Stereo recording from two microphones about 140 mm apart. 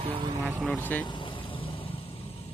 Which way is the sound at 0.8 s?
10° left (ahead or behind).